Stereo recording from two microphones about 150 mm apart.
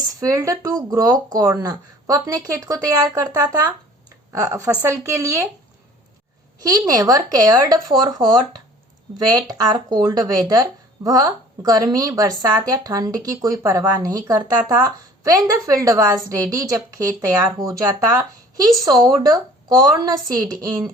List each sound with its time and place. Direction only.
0.2 s a woman's voice: 20° right (ahead or behind)
6.6 s a woman's voice: 25° right (ahead or behind)